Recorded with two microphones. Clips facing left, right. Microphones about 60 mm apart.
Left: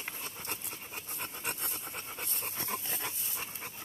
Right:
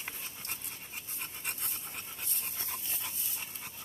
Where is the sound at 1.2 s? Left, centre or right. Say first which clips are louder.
Left 3 dB; left.